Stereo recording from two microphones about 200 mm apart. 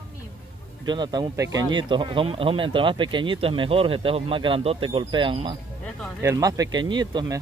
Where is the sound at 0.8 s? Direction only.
20° right (ahead or behind).